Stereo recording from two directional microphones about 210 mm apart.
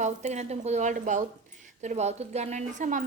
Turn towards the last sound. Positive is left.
turn(degrees=-40)  # may be behind; listen again after turning